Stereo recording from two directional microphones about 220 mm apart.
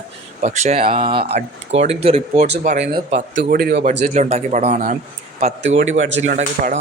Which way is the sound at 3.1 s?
50° right (ahead or behind).